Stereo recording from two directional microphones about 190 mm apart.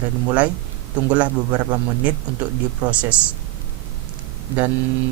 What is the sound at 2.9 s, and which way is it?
Speech, 5° right (ahead or behind).